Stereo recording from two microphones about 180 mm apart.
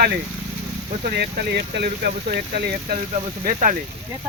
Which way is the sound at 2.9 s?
45° right (ahead or behind).